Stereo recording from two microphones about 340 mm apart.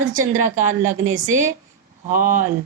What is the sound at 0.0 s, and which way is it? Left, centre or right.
A woman's voice, right.